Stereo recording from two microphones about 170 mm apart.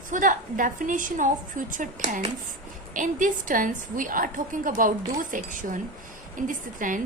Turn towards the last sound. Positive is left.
turn(degrees=-50)  # may be behind; listen again after turning